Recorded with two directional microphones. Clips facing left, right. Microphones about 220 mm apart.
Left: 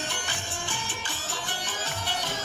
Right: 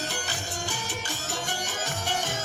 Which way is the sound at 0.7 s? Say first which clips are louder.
Right 2 dB; 45° right (ahead or behind).